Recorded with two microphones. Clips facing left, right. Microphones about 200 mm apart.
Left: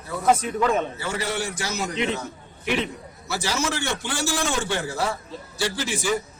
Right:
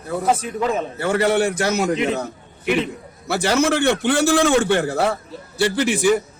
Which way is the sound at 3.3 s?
60° right (ahead or behind).